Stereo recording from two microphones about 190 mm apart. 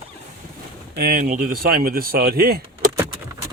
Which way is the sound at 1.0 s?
50° right (ahead or behind).